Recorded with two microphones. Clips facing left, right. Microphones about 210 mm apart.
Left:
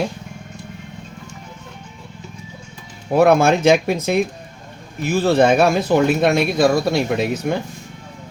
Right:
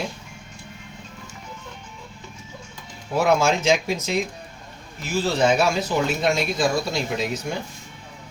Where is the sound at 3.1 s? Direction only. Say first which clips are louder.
Left 6 dB; 60° left (ahead or behind).